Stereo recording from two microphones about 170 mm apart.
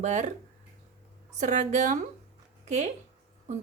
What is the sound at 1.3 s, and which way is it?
Speech, 45° right (ahead or behind).